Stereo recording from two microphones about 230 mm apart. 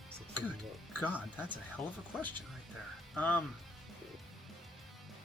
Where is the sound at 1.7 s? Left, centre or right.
Centre.